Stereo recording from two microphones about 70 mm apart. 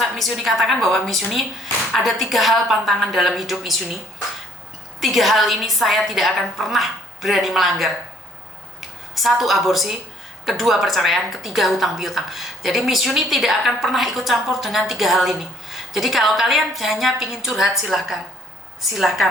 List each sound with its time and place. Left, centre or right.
0.0 s speech: centre
4.9 s speech: centre